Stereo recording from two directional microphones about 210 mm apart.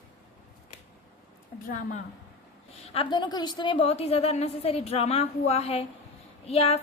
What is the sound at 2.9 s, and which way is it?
A woman's voice, 20° left (ahead or behind).